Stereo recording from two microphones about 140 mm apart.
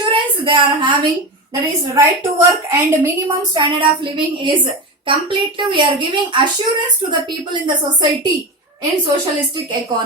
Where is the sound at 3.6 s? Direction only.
35° right (ahead or behind).